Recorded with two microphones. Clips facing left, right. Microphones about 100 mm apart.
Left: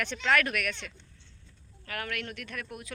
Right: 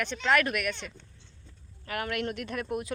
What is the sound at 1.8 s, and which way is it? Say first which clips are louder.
Speech: right 5 dB; 15° right (ahead or behind).